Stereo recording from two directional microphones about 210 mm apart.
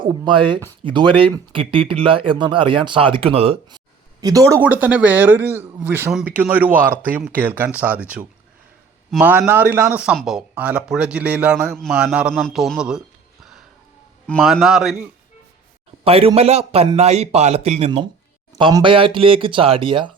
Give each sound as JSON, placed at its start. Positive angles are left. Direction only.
{"t": 0.0, "sound": "speech", "side_deg": -25}
{"t": 4.2, "sound": "a man's voice", "side_deg": -15}
{"t": 14.3, "sound": "a man's voice", "side_deg": 5}
{"t": 16.0, "sound": "speech", "side_deg": -30}